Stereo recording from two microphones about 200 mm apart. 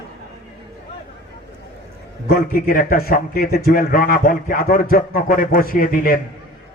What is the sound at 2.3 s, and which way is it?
A man's voice, 45° left (ahead or behind).